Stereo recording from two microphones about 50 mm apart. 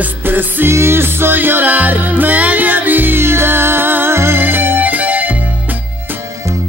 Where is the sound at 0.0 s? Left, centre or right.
Right.